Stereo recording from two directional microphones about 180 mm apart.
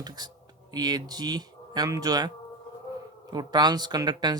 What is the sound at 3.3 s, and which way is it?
Speech, 25° right (ahead or behind).